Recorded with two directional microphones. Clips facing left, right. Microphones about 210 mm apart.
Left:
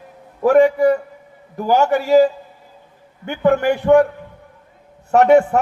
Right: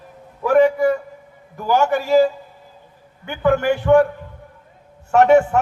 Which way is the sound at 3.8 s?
30° left (ahead or behind).